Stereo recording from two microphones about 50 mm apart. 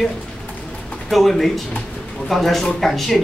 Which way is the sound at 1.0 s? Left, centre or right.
Centre.